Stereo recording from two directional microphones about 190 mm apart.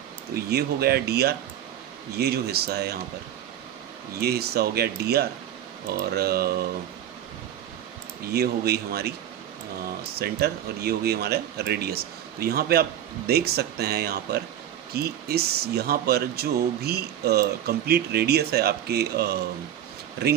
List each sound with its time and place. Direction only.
0.3 s speech: 55° right (ahead or behind)
4.2 s speech: 55° right (ahead or behind)
8.3 s speech: 55° right (ahead or behind)
10.1 s speech: 55° right (ahead or behind)